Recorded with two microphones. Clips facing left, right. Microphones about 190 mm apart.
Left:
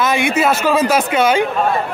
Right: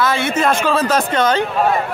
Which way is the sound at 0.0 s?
15° left (ahead or behind).